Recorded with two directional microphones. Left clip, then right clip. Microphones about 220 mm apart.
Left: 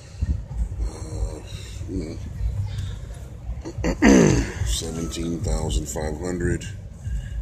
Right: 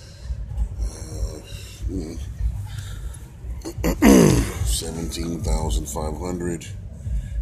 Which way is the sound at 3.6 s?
20° right (ahead or behind).